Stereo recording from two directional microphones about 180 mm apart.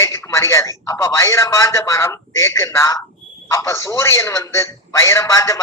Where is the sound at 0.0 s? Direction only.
15° left (ahead or behind).